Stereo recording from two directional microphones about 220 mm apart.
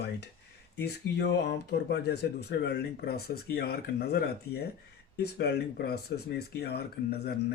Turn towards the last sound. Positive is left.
turn(degrees=45)  # may be behind; listen again after turning